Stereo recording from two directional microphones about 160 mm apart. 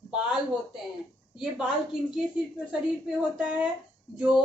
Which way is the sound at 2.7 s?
5° right (ahead or behind).